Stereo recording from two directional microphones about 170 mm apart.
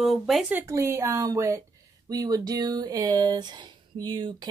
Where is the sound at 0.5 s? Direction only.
15° right (ahead or behind).